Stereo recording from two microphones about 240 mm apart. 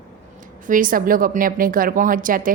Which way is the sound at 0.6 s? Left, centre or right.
Right.